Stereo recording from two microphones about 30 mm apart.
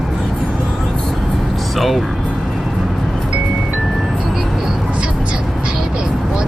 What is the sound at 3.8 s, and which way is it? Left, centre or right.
Music, centre.